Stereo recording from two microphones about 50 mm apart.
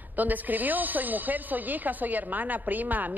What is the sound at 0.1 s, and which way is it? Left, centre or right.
Speech, right.